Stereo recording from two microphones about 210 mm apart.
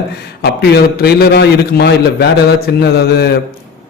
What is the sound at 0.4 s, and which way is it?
A man's voice, 50° left (ahead or behind).